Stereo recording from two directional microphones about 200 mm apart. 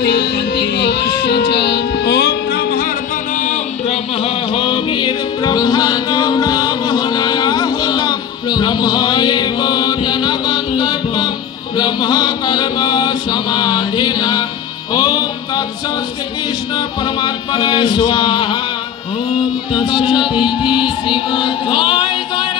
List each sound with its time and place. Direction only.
0.0 s music: 55° left (ahead or behind)
3.3 s music: 35° left (ahead or behind)
11.7 s mantra: 20° left (ahead or behind)
15.0 s music: 20° left (ahead or behind)
16.7 s music: 20° left (ahead or behind)
19.7 s music: 20° left (ahead or behind)